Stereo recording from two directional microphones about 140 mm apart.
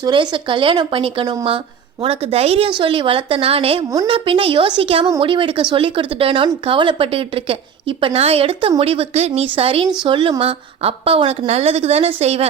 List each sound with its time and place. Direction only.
0.0 s a woman's voice: 35° right (ahead or behind)